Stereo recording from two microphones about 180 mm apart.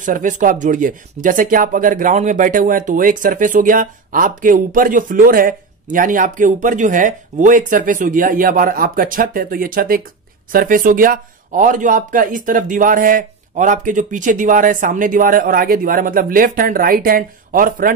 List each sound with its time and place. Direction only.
0.0 s speech: 45° right (ahead or behind)